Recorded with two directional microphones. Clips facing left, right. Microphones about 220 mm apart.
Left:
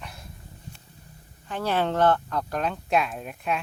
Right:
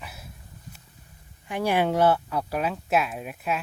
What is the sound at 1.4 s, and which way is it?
Speech, 15° right (ahead or behind).